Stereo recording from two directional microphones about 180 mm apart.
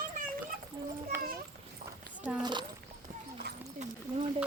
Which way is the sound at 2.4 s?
25° right (ahead or behind).